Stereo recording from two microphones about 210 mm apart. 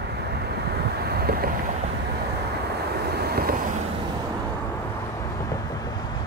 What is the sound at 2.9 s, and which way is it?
Vehicle, 50° right (ahead or behind).